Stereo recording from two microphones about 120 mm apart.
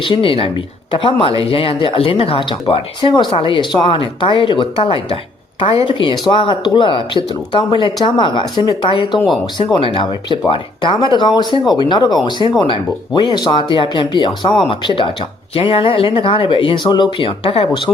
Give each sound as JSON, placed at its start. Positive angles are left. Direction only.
{"t": 0.0, "sound": "speech", "side_deg": 45}